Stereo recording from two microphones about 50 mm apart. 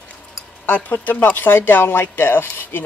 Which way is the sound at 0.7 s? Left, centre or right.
Left.